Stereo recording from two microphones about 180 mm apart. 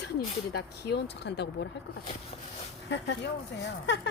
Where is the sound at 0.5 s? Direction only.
65° left (ahead or behind).